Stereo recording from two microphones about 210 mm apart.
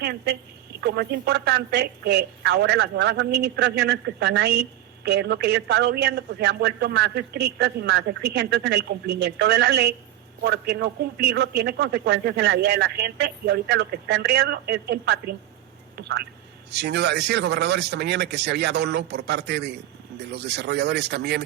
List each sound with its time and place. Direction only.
0.0 s a man's voice: 50° right (ahead or behind)